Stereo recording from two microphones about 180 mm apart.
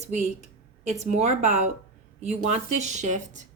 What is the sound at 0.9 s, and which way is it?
Speech, 35° right (ahead or behind).